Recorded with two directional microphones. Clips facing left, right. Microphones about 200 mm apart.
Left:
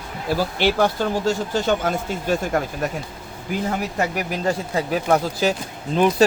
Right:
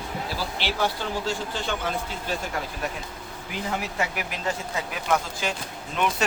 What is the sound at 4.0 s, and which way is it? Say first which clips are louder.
Speech: left 6 dB; 40° left (ahead or behind).